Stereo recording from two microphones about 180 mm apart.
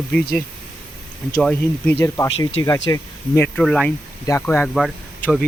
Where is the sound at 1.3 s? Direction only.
10° left (ahead or behind).